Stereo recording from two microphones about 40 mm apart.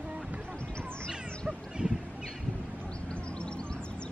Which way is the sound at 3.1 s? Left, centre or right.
Left.